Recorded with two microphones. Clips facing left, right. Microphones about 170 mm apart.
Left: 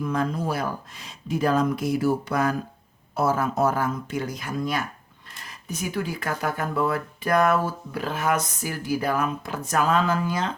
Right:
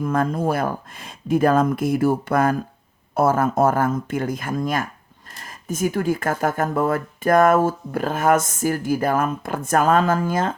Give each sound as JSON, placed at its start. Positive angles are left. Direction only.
{"t": 0.0, "sound": "speech", "side_deg": -50}